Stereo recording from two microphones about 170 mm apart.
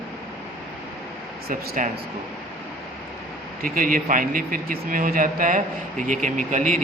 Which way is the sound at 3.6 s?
55° right (ahead or behind).